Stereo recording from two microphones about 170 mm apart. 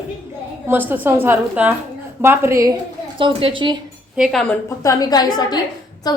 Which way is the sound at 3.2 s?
30° right (ahead or behind).